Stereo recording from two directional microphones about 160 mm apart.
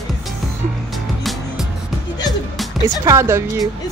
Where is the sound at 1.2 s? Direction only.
Centre (ahead or behind).